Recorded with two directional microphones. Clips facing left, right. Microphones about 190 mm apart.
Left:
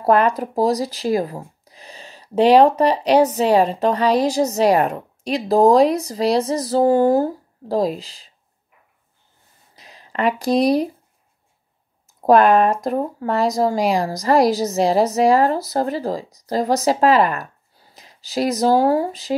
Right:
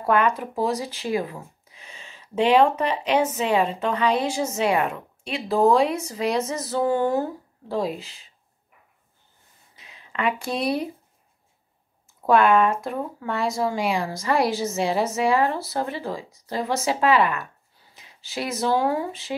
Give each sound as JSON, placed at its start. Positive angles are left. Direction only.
{"t": 0.0, "sound": "speech", "side_deg": 35}
{"t": 9.8, "sound": "speech", "side_deg": 40}
{"t": 12.2, "sound": "speech", "side_deg": 40}